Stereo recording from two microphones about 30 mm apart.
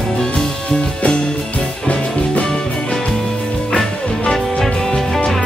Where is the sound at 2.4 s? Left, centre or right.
Left.